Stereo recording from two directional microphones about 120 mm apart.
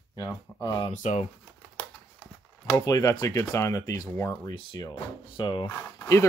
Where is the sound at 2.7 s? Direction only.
30° left (ahead or behind).